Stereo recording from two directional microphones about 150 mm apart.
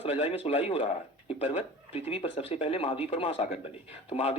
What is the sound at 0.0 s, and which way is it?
Speech, 45° left (ahead or behind).